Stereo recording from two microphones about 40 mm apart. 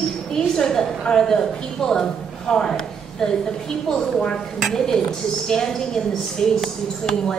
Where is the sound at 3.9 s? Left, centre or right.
Centre.